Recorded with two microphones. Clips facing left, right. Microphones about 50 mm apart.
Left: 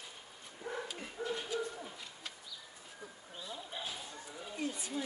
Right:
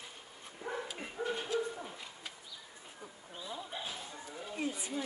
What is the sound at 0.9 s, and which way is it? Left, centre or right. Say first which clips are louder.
Dog: right 2 dB; right.